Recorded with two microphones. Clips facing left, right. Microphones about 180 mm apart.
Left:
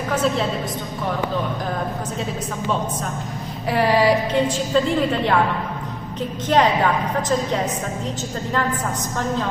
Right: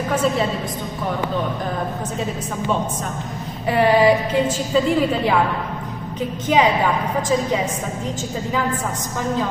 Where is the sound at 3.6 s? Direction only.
Centre (ahead or behind).